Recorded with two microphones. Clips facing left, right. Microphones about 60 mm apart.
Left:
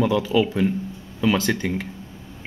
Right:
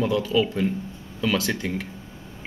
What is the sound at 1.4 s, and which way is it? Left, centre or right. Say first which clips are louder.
Speech: left 3 dB; centre.